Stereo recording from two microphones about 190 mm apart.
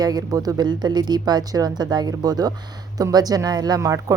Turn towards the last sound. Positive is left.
turn(degrees=-15)  # may be behind; listen again after turning